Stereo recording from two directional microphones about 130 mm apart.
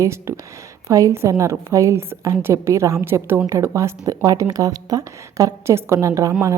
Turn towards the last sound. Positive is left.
turn(degrees=-25)  # may be behind; listen again after turning